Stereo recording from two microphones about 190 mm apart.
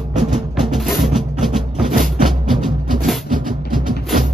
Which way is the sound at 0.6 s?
Centre (ahead or behind).